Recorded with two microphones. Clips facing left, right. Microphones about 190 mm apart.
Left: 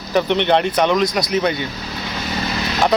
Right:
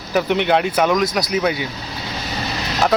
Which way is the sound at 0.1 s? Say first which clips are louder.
Left 1 dB; 5° right (ahead or behind).